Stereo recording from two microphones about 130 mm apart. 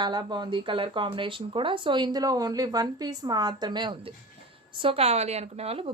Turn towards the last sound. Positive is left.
turn(degrees=-50)  # may be behind; listen again after turning